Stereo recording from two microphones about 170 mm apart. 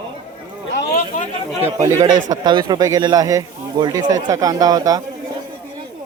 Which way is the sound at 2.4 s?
25° right (ahead or behind).